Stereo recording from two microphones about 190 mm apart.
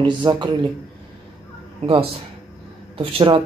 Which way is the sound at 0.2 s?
25° right (ahead or behind).